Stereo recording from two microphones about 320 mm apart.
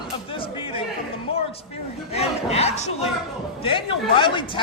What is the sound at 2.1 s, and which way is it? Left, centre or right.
Crowd, centre.